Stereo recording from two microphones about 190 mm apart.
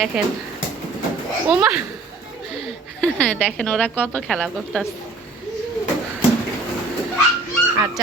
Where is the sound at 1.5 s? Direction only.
5° right (ahead or behind).